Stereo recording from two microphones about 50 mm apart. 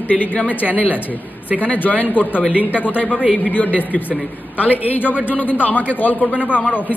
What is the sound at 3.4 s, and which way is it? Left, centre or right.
Speech, left.